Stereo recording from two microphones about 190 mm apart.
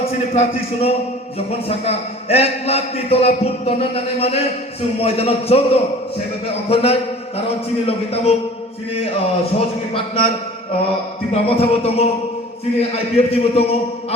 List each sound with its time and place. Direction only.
0.0 s a man's voice: 30° left (ahead or behind)
9.6 s a man's voice: 30° left (ahead or behind)
11.3 s a man's voice: 30° left (ahead or behind)
13.1 s a man's voice: 30° left (ahead or behind)